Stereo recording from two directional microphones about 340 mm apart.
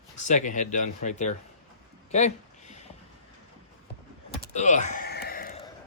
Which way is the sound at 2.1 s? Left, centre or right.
Centre.